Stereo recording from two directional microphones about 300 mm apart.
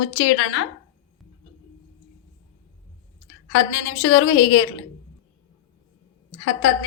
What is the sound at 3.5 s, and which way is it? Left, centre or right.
A woman's voice, left.